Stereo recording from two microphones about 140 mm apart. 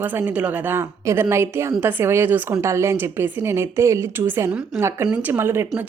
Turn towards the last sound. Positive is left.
turn(degrees=-15)  # may be behind; listen again after turning